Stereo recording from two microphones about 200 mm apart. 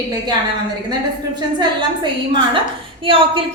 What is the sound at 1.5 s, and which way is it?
A woman's voice, 25° right (ahead or behind).